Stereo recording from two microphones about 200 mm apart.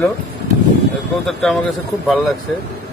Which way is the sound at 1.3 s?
Centre (ahead or behind).